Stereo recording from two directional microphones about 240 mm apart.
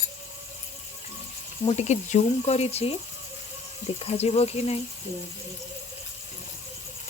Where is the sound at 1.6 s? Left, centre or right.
Left.